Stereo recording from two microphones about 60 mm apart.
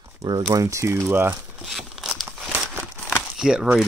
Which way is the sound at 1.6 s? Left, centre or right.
Centre.